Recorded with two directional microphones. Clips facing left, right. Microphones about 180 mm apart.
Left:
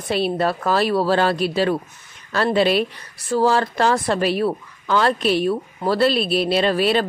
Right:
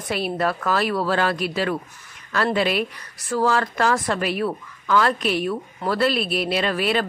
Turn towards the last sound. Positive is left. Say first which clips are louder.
# left 4 dB
turn(degrees=30)  # may be behind; listen again after turning